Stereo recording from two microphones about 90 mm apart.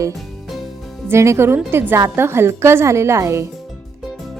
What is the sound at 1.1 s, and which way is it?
A woman's voice, 30° right (ahead or behind).